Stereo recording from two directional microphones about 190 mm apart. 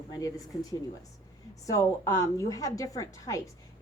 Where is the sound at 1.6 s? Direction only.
15° left (ahead or behind).